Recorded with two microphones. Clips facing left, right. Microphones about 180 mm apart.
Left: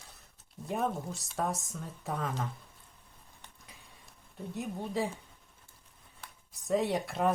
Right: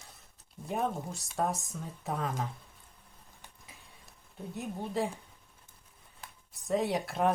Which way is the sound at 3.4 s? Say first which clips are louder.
Even; centre (ahead or behind).